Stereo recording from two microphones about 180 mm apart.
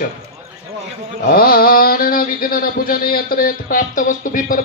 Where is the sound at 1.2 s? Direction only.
55° left (ahead or behind).